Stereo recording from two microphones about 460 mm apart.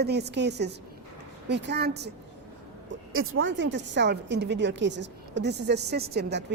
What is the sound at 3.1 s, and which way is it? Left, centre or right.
A woman's voice, right.